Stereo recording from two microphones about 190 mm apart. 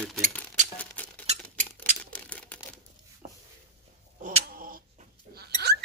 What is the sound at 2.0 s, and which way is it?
Camera, 5° left (ahead or behind).